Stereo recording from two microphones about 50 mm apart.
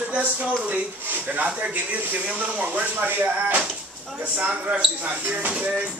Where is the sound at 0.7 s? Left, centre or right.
Right.